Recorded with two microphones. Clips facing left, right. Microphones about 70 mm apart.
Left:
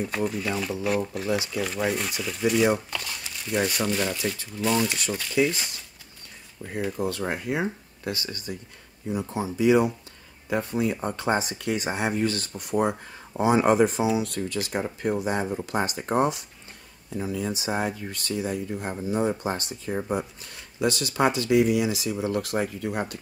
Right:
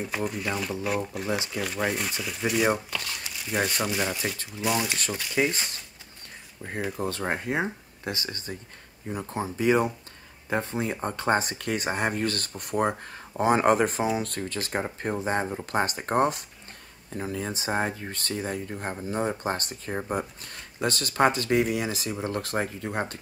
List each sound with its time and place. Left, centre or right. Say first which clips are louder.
0.1 s speech: left 2 dB; centre
5.3 s speech: left 2 dB; right